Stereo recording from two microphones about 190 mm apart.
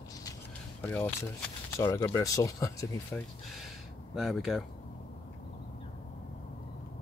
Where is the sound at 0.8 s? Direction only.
10° left (ahead or behind).